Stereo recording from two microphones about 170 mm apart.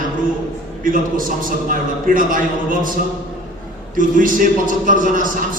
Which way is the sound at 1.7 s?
55° right (ahead or behind).